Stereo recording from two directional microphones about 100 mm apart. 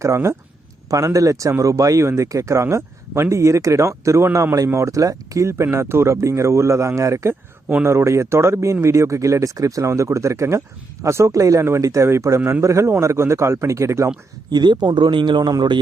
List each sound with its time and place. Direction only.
0.0 s speech: 30° right (ahead or behind)
14.5 s speech: 45° right (ahead or behind)